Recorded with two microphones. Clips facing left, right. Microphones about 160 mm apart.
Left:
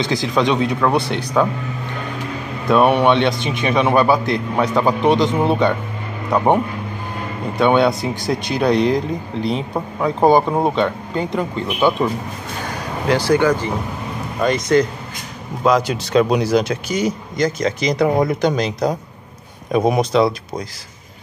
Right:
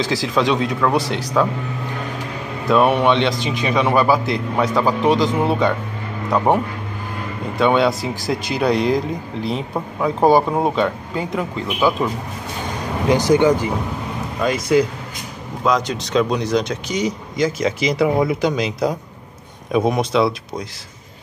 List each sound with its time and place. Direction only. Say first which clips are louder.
0.0 s speech: left 1 dB; centre (ahead or behind)
2.7 s speech: left 1 dB; centre (ahead or behind)
13.1 s speech: right 1 dB; 15° right (ahead or behind)
14.4 s speech: left 1 dB; 5° right (ahead or behind)